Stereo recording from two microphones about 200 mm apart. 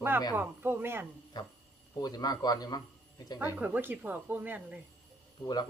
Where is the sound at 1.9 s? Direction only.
20° left (ahead or behind).